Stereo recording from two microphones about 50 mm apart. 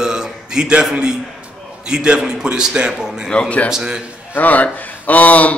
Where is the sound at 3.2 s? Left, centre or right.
Left.